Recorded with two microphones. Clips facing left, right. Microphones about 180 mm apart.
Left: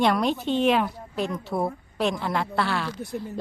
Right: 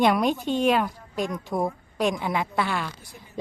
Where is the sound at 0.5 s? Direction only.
10° right (ahead or behind).